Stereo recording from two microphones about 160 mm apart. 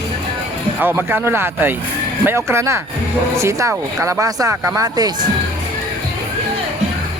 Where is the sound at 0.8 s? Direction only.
10° right (ahead or behind).